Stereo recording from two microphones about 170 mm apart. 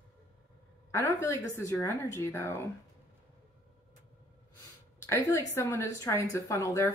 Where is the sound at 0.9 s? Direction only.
15° left (ahead or behind).